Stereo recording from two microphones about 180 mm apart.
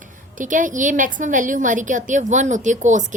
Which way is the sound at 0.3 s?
45° right (ahead or behind).